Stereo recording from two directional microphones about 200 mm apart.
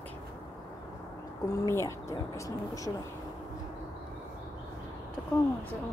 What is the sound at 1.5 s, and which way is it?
Speech, 15° left (ahead or behind).